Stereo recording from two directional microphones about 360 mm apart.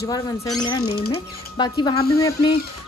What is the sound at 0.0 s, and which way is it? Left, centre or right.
Speech, centre.